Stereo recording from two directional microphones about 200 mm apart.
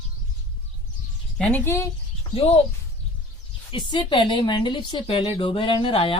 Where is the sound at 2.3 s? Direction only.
30° left (ahead or behind).